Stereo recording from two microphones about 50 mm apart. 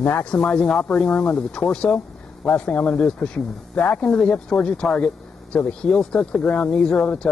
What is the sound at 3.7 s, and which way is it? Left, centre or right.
Speech, left.